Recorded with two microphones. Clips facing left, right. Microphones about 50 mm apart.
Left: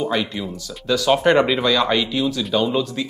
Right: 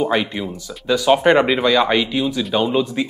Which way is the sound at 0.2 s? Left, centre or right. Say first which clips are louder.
Right 2 dB; right.